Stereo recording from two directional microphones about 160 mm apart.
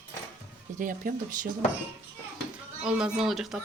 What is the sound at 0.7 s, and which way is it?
Speech, 60° right (ahead or behind).